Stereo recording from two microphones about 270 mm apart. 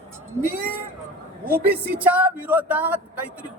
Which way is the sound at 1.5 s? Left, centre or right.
Right.